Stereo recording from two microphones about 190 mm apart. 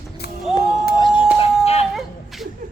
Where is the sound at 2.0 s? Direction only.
Centre (ahead or behind).